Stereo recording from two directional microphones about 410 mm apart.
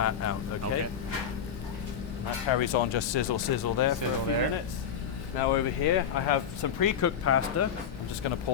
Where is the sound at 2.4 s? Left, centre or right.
Left.